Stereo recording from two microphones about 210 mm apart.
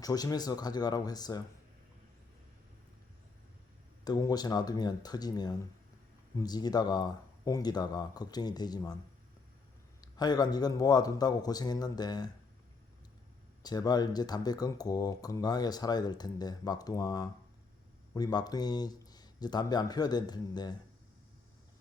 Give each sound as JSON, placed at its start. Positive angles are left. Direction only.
{"t": 0.0, "sound": "speech", "side_deg": 15}
{"t": 4.0, "sound": "speech", "side_deg": 20}
{"t": 10.0, "sound": "speech", "side_deg": 20}
{"t": 13.6, "sound": "speech", "side_deg": 20}